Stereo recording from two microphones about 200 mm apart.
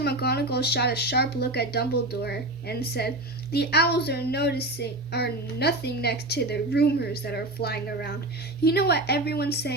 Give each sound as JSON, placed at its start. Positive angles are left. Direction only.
{"t": 0.0, "sound": "a woman's voice", "side_deg": 55}